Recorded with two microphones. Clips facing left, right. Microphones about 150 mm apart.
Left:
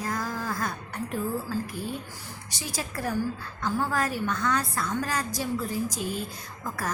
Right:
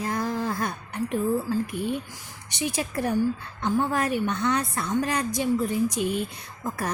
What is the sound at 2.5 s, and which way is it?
A woman's voice, 25° right (ahead or behind).